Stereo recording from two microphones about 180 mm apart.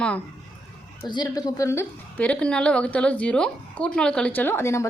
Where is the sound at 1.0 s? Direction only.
25° left (ahead or behind).